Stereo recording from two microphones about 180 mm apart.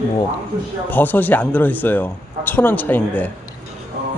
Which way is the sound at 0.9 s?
10° left (ahead or behind).